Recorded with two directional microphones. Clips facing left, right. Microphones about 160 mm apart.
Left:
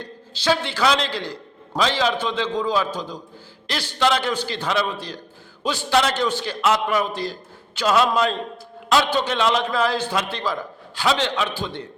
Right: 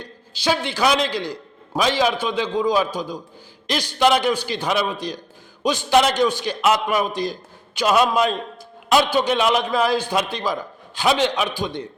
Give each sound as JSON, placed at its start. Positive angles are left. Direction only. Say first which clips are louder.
{"t": 0.0, "sound": "a man's voice", "louder": "right 1 dB", "side_deg": -15}